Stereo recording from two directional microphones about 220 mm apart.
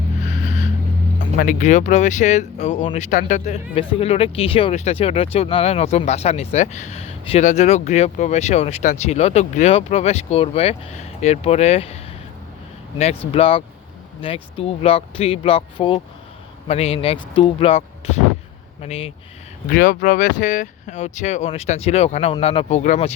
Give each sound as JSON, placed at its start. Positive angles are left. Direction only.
{"t": 0.4, "sound": "vehicle", "side_deg": 35}
{"t": 1.4, "sound": "speech", "side_deg": 35}
{"t": 13.0, "sound": "speech", "side_deg": 30}
{"t": 19.6, "sound": "speech", "side_deg": 40}